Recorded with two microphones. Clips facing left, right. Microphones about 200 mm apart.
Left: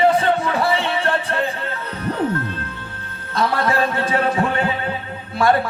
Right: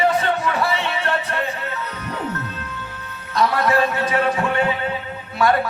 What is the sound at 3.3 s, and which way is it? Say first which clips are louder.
Speech: right 1 dB; 30° left (ahead or behind).